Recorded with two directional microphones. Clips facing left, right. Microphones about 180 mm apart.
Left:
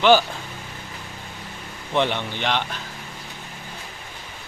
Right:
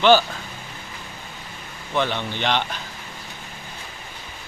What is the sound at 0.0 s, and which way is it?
Speech, 15° left (ahead or behind).